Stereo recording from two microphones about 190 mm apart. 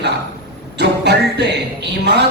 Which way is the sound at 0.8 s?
60° right (ahead or behind).